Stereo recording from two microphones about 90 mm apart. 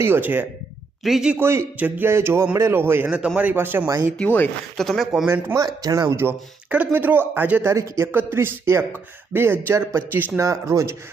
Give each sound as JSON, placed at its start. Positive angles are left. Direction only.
{"t": 0.0, "sound": "speech", "side_deg": -25}
{"t": 1.0, "sound": "speech", "side_deg": -5}
{"t": 1.4, "sound": "speech", "side_deg": -30}
{"t": 3.8, "sound": "speech", "side_deg": -35}
{"t": 4.8, "sound": "speech", "side_deg": 0}
{"t": 5.5, "sound": "speech", "side_deg": -45}
{"t": 6.7, "sound": "speech", "side_deg": -20}
{"t": 7.6, "sound": "speech", "side_deg": -30}